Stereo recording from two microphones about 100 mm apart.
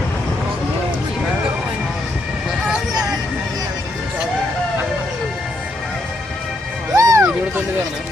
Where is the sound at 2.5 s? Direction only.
5° right (ahead or behind).